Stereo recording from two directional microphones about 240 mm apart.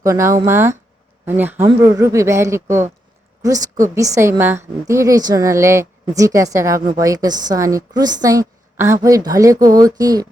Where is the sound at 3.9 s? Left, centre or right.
Centre.